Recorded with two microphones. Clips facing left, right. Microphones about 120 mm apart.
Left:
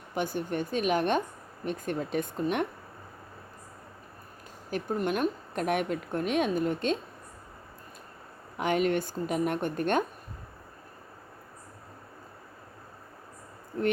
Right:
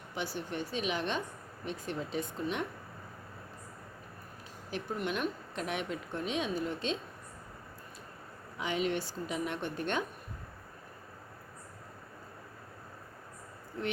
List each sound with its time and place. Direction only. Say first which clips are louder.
0.1 s a woman's voice: left 7 dB; 50° left (ahead or behind)
4.7 s a woman's voice: left 6 dB; 45° left (ahead or behind)
8.5 s a woman's voice: left 6 dB; 55° left (ahead or behind)